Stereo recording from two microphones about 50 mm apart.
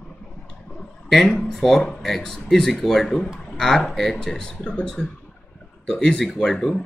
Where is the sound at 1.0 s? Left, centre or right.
Centre.